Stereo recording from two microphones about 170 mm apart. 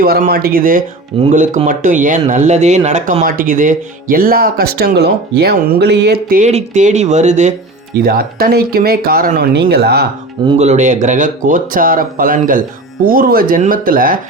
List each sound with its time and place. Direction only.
0.0 s speech: 60° right (ahead or behind)
1.2 s speech: 45° right (ahead or behind); by 6.4 s 65° right (ahead or behind)
6.4 s speech: 40° right (ahead or behind)
8.0 s speech: 60° right (ahead or behind)
10.6 s speech: 45° right (ahead or behind)